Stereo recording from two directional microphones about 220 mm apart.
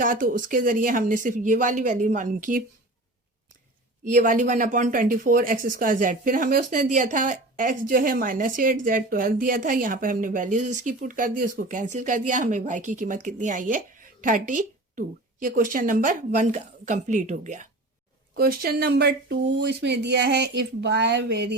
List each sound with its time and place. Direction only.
0.0 s a woman's voice: 40° right (ahead or behind)
4.1 s a woman's voice: 35° right (ahead or behind); by 21.5 s 50° right (ahead or behind)